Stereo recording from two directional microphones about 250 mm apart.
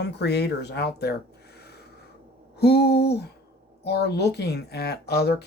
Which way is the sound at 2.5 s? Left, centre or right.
Left.